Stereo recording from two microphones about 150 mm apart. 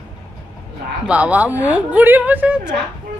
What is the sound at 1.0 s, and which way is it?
Speech, 10° right (ahead or behind).